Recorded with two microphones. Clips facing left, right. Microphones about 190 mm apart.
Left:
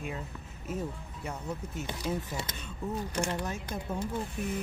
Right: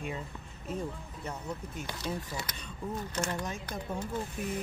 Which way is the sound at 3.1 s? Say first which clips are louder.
Left 1 dB; 15° left (ahead or behind).